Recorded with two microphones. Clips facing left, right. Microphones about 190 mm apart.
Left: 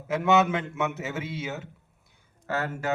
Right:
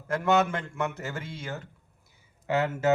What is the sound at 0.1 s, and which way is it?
Speech, 5° left (ahead or behind).